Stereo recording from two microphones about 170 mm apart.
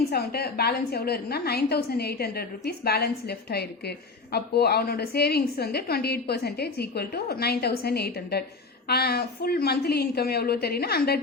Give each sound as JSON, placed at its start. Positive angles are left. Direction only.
{"t": 0.1, "sound": "a woman's voice", "side_deg": 65}